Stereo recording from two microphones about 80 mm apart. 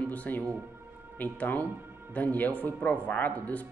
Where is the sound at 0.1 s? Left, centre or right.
Centre.